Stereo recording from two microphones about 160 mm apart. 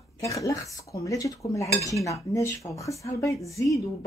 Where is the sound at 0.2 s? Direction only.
20° left (ahead or behind).